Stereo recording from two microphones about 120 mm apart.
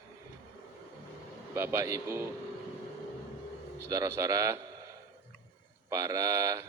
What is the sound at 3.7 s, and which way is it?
Speech, 25° right (ahead or behind).